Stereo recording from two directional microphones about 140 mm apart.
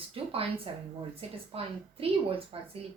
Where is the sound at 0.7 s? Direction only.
40° right (ahead or behind).